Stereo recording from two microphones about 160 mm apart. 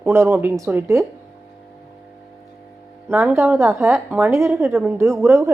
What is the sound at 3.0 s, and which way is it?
A woman's voice, 15° right (ahead or behind).